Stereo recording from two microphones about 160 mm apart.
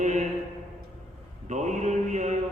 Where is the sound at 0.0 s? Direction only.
45° right (ahead or behind).